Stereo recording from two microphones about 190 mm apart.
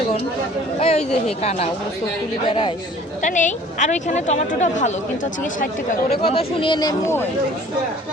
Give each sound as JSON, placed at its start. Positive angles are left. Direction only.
{"t": 0.8, "sound": "a woman's voice", "side_deg": 30}
{"t": 3.2, "sound": "a woman's voice", "side_deg": 40}
{"t": 6.2, "sound": "speech", "side_deg": 30}